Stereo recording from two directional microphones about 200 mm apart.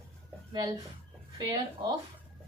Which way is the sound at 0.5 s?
20° right (ahead or behind).